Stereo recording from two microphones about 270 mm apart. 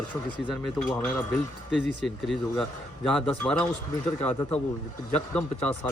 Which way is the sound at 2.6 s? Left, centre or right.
Centre.